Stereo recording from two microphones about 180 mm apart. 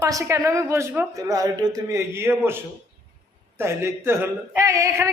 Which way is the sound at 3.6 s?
15° right (ahead or behind).